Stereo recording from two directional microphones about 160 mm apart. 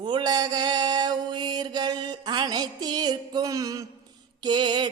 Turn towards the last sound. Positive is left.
turn(degrees=-30)  # may be behind; listen again after turning